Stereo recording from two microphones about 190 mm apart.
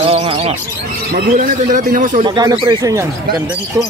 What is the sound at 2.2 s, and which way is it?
Speech, 20° right (ahead or behind).